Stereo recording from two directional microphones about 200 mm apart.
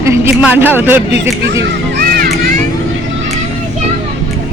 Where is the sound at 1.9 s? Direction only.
50° right (ahead or behind).